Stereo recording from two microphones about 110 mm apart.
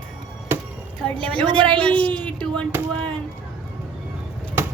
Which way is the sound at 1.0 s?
50° right (ahead or behind).